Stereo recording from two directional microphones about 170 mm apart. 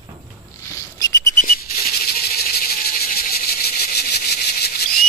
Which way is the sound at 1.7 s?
65° left (ahead or behind).